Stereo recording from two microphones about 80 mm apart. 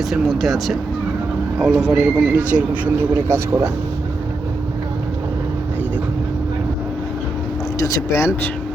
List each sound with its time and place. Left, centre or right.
0.1 s speech: centre
3.2 s speech: right
7.8 s speech: left